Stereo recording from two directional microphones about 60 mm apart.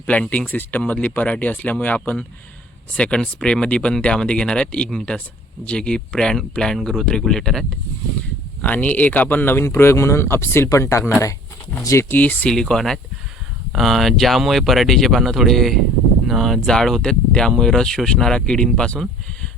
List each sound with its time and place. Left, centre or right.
0.0 s speech: left; by 7.6 s centre
8.6 s speech: left
9.6 s speech: left
10.7 s speech: left
11.8 s speech: left
12.0 s speech: left
12.5 s speech: centre